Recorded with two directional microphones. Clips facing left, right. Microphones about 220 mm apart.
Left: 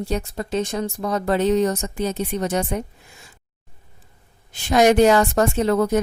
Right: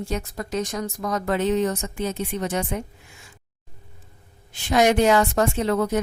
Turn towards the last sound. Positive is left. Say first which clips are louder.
# left 3 dB
turn(degrees=45)  # may be behind; listen again after turning